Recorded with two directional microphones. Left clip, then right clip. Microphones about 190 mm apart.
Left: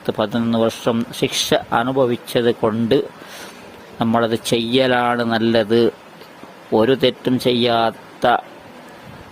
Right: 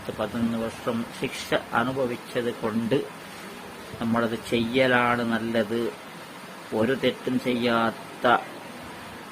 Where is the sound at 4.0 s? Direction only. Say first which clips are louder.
Left 9 dB; 50° left (ahead or behind).